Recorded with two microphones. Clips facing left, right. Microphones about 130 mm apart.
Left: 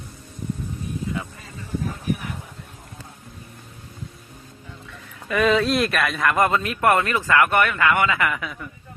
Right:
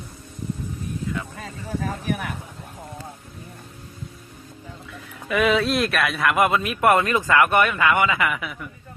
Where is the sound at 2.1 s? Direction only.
70° right (ahead or behind).